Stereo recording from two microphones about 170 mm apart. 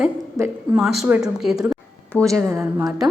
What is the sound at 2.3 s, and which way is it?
Speech, 15° right (ahead or behind).